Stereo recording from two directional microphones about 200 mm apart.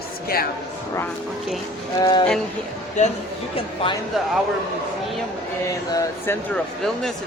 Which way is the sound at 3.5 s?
30° left (ahead or behind).